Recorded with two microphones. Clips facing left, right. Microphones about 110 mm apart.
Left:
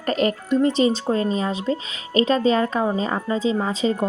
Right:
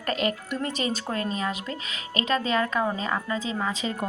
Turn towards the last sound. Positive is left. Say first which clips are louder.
# left 7 dB
turn(degrees=30)  # may be behind; listen again after turning